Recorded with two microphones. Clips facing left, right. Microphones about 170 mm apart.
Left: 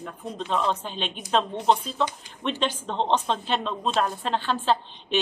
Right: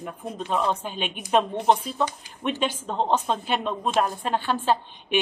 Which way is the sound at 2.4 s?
10° right (ahead or behind).